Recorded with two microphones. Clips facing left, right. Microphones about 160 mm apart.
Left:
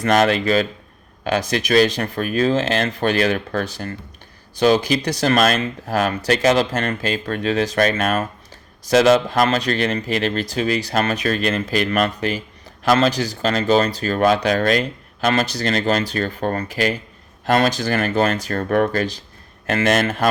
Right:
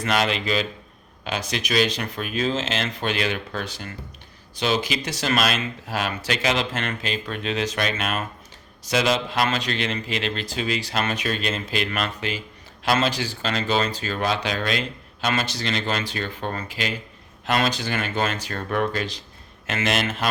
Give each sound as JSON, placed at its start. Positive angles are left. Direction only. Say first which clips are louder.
{"t": 0.0, "sound": "speech", "louder": "left 7 dB", "side_deg": 45}